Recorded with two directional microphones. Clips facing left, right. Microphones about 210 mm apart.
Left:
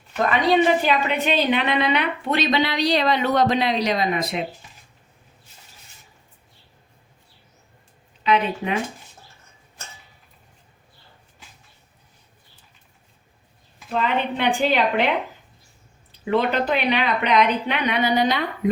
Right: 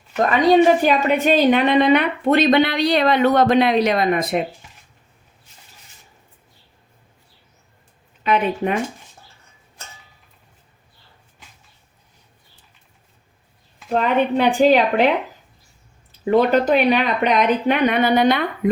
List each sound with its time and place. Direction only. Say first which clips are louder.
0.3 s a woman's voice: right 5 dB; 45° right (ahead or behind)
8.2 s a woman's voice: right 2 dB; 50° right (ahead or behind)
13.9 s a woman's voice: right 6 dB; 45° right (ahead or behind)
16.3 s a woman's voice: right 6 dB; 45° right (ahead or behind)